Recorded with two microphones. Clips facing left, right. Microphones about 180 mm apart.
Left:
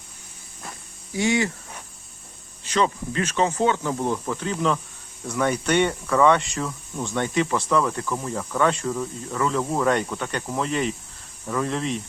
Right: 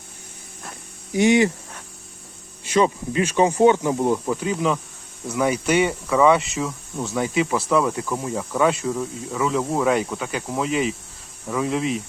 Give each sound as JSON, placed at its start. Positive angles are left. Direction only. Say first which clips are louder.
{"t": 1.1, "sound": "speech", "louder": "right 6 dB", "side_deg": -20}
{"t": 2.6, "sound": "speech", "louder": "right 4 dB", "side_deg": -15}